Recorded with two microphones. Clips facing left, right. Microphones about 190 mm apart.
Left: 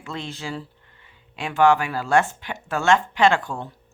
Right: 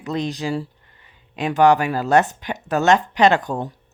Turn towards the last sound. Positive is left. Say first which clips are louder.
# right 3 dB
turn(degrees=-20)  # may be behind; listen again after turning